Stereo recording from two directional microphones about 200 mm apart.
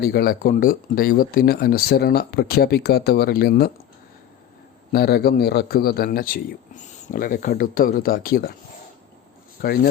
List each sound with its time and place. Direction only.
0.0 s a man's voice: 50° left (ahead or behind)
4.9 s a man's voice: 50° left (ahead or behind)
9.6 s speech: 50° left (ahead or behind)